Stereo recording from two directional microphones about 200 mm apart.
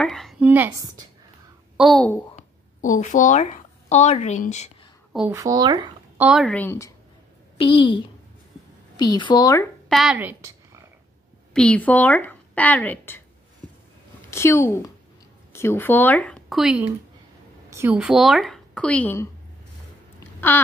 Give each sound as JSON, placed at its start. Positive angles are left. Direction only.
{"t": 0.0, "sound": "a woman's voice", "side_deg": 0}
{"t": 1.8, "sound": "speech", "side_deg": 5}
{"t": 2.3, "sound": "a woman's voice", "side_deg": 40}
{"t": 5.3, "sound": "speech", "side_deg": -15}
{"t": 6.1, "sound": "speech", "side_deg": -5}
{"t": 6.4, "sound": "a woman's voice", "side_deg": 10}
{"t": 7.5, "sound": "a woman's voice", "side_deg": 25}
{"t": 9.8, "sound": "a sound", "side_deg": 0}
{"t": 11.5, "sound": "a woman's voice", "side_deg": 5}
{"t": 14.3, "sound": "a woman's voice", "side_deg": 10}
{"t": 20.3, "sound": "a sound", "side_deg": 10}